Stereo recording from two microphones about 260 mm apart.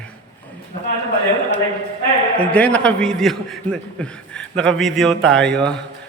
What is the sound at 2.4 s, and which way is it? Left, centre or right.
A man's voice, centre.